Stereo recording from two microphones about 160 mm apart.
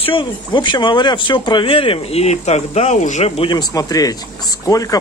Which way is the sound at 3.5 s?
25° left (ahead or behind).